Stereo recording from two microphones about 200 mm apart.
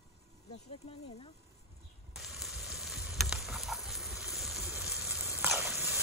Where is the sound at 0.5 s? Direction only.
30° left (ahead or behind).